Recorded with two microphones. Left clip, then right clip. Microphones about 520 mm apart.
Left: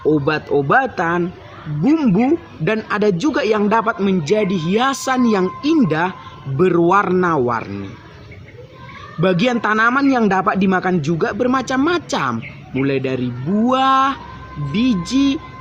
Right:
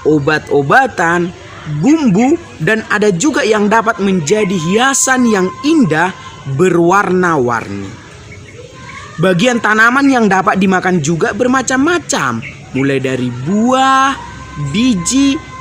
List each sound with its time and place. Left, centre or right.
0.1 s speech: left
9.2 s speech: left